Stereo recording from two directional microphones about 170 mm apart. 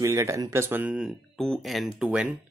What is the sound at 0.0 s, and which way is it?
Speech, 20° right (ahead or behind).